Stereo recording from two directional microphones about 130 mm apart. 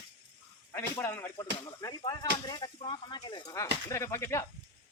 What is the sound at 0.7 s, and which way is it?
Speech, 15° left (ahead or behind).